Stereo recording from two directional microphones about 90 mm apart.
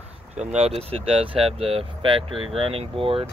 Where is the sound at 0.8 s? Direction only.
90° right.